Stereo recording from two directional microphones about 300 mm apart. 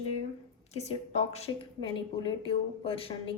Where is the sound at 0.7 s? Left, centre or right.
Left.